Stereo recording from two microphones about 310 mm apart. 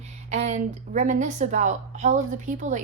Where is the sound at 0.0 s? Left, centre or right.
Right.